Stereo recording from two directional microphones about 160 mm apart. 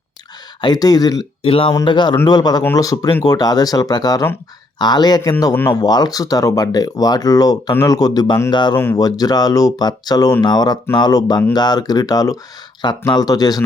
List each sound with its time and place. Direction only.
0.6 s speech: 25° left (ahead or behind)
1.4 s speech: 35° left (ahead or behind)